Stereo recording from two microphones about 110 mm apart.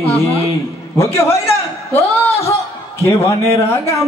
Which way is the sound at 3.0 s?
20° left (ahead or behind).